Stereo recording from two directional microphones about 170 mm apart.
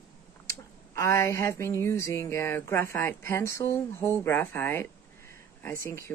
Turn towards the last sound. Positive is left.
turn(degrees=15)  # may be behind; listen again after turning